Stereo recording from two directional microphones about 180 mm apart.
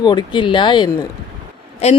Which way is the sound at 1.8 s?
35° left (ahead or behind).